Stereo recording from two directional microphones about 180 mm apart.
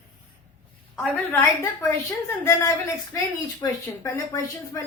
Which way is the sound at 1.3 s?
15° left (ahead or behind).